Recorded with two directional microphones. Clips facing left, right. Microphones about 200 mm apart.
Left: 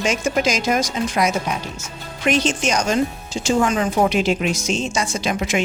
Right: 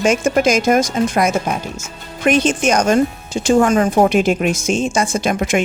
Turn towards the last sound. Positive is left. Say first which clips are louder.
# right 4 dB
turn(degrees=-50)  # may be behind; listen again after turning